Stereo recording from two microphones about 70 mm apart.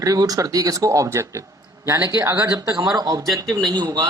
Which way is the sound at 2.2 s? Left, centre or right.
Right.